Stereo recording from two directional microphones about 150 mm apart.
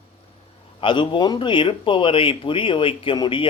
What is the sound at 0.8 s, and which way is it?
Speech, 35° left (ahead or behind).